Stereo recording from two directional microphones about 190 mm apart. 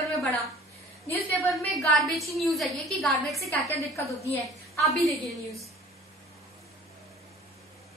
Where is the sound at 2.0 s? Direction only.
Centre (ahead or behind).